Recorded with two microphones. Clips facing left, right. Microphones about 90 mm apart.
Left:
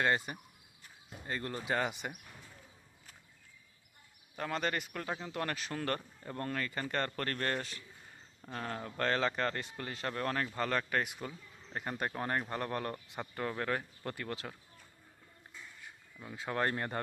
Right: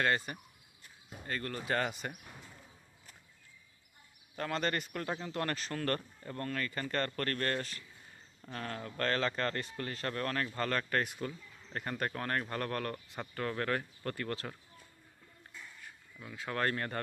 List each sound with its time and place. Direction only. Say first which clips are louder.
0.0 s speech: even; 15° left (ahead or behind)
4.4 s speech: right 1 dB; 10° left (ahead or behind)
15.8 s speech: even; 15° left (ahead or behind)